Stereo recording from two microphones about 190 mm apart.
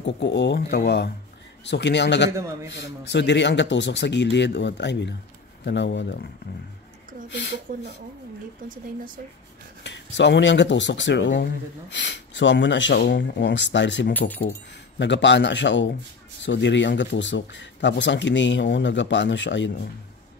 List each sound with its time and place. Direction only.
0.0 s speech: 65° left (ahead or behind)
2.3 s a man's voice: 15° right (ahead or behind)
2.7 s speech: 65° left (ahead or behind)
7.7 s speech: 45° right (ahead or behind)
9.8 s speech: 70° left (ahead or behind)